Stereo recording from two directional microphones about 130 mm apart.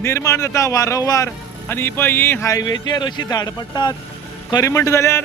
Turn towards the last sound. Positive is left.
turn(degrees=20)  # may be behind; listen again after turning